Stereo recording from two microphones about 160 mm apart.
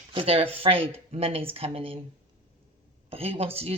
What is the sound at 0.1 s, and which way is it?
Speech, 35° right (ahead or behind).